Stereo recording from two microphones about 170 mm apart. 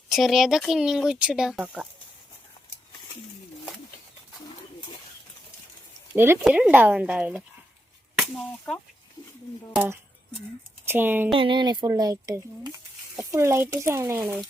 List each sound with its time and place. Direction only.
0.1 s speech: centre (ahead or behind)
6.1 s speech: 15° right (ahead or behind)
9.7 s speech: 10° right (ahead or behind)
11.3 s speech: 30° right (ahead or behind)